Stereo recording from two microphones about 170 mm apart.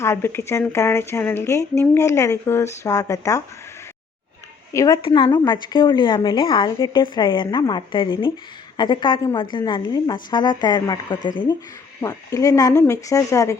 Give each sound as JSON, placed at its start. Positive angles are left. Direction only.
{"t": 0.0, "sound": "speech", "side_deg": 15}
{"t": 4.7, "sound": "speech", "side_deg": 20}
{"t": 5.0, "sound": "a woman's voice", "side_deg": 30}